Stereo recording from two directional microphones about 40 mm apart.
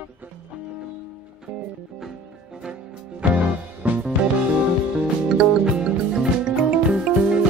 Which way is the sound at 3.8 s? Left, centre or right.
Right.